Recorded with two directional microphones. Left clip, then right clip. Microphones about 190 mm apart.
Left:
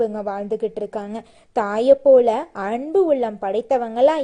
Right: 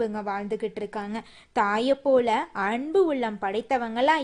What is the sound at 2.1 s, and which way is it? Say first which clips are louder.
A woman's voice: left 6 dB; 45° right (ahead or behind).